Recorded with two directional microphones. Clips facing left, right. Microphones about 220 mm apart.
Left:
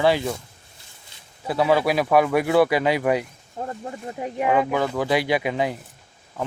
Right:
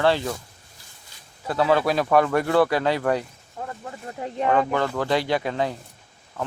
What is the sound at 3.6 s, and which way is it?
Speech, 25° left (ahead or behind).